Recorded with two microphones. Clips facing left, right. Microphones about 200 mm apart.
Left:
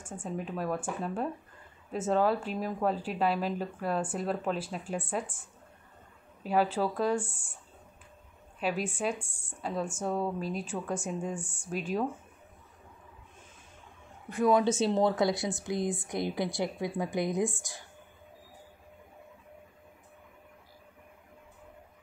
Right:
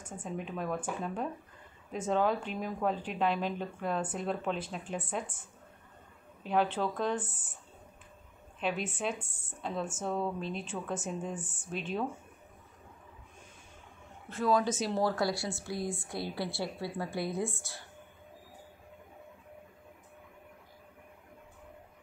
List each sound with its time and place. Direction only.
0.0 s speech: 5° left (ahead or behind)
6.5 s a woman's voice: 5° left (ahead or behind)
8.5 s speech: 5° left (ahead or behind)
9.2 s speech: 5° right (ahead or behind)
10.0 s speech: 5° left (ahead or behind)
11.7 s a woman's voice: 10° left (ahead or behind)
14.3 s a woman's voice: 20° left (ahead or behind)